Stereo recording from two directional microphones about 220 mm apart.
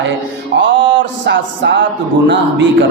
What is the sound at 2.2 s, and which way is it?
Speech, 55° right (ahead or behind).